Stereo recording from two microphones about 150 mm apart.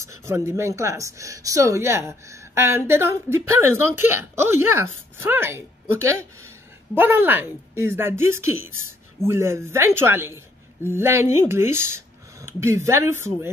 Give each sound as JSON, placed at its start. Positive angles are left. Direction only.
{"t": 0.0, "sound": "speech", "side_deg": -20}